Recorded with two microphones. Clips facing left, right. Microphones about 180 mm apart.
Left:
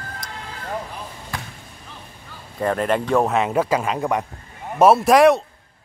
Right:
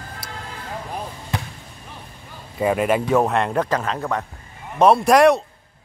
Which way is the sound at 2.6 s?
10° right (ahead or behind).